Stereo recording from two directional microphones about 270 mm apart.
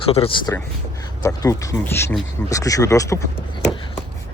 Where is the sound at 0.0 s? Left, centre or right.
Left.